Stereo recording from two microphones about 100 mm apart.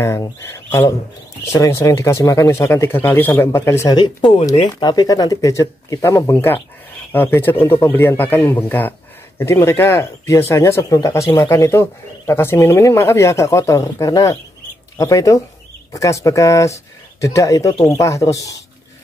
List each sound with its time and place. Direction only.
0.0 s speech: 25° left (ahead or behind)
3.9 s speech: 45° left (ahead or behind)
6.3 s speech: 20° left (ahead or behind); by 18.6 s 35° left (ahead or behind)